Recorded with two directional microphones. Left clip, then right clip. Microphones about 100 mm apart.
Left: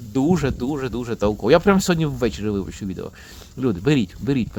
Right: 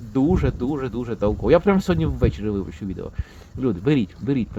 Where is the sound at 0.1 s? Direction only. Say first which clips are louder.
Left 1 dB; 20° left (ahead or behind).